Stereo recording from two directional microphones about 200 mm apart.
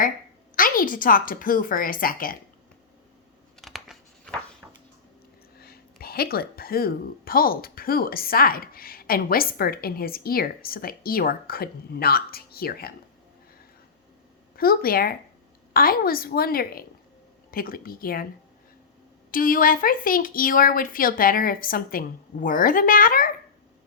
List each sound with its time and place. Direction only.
0.5 s a woman's voice: 45° left (ahead or behind)
3.6 s a sound: centre (ahead or behind)
5.5 s a woman's voice: 50° left (ahead or behind)
14.5 s a woman's voice: 50° left (ahead or behind)
19.3 s a woman's voice: 45° left (ahead or behind)